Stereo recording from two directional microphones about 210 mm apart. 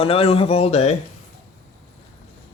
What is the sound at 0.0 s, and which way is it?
Speech, 25° left (ahead or behind).